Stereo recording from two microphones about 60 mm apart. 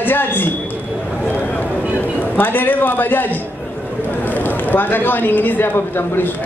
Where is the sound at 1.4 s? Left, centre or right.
Left.